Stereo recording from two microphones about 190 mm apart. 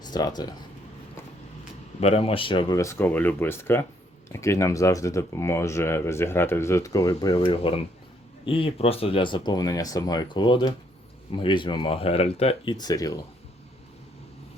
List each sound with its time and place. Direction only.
0.0 s speech: 20° left (ahead or behind)
2.0 s speech: 35° left (ahead or behind)